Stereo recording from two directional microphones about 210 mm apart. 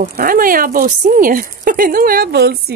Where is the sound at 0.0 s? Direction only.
40° right (ahead or behind).